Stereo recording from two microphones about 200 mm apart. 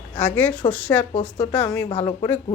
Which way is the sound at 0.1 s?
10° left (ahead or behind).